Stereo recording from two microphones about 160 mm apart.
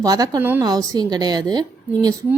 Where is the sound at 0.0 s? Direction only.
25° right (ahead or behind).